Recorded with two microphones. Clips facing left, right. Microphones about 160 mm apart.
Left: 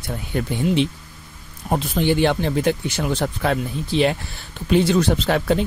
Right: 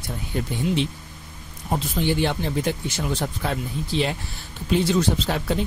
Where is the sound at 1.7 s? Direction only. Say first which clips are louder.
Left 4 dB; 65° left (ahead or behind).